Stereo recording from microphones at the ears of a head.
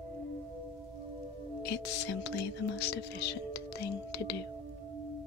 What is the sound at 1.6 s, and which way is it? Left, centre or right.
Speech, left.